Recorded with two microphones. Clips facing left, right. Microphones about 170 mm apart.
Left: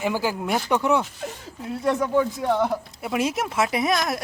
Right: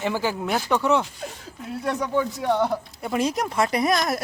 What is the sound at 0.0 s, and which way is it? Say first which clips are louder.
Speech: even; 10° left (ahead or behind).